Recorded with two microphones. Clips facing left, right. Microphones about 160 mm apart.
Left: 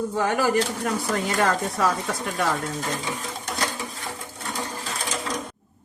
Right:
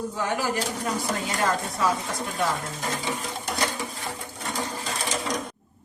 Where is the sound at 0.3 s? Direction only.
60° left (ahead or behind).